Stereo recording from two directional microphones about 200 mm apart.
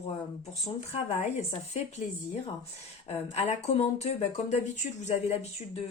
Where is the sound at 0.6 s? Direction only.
35° left (ahead or behind).